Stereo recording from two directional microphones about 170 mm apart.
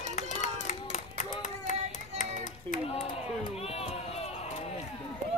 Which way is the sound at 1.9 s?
45° left (ahead or behind).